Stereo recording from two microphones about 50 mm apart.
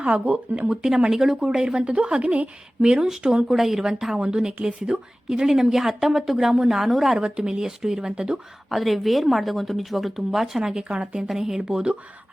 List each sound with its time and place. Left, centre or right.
0.0 s speech: right
0.7 s a woman's voice: centre; by 2.5 s right
2.8 s a woman's voice: centre
5.5 s a woman's voice: centre
7.2 s a woman's voice: centre
8.7 s a woman's voice: centre